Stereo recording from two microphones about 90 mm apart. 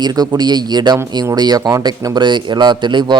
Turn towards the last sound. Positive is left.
turn(degrees=-60)  # may be behind; listen again after turning